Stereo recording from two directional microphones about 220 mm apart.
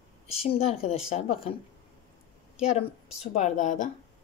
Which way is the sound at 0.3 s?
25° left (ahead or behind).